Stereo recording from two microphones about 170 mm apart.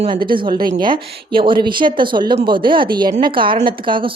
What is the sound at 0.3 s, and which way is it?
A woman's voice, 30° right (ahead or behind).